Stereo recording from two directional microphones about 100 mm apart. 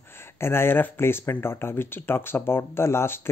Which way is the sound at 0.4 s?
25° left (ahead or behind).